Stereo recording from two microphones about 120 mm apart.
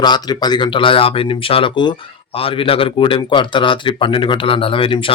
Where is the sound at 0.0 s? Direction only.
35° left (ahead or behind).